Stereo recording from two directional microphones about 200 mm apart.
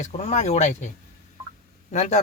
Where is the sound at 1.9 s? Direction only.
35° left (ahead or behind).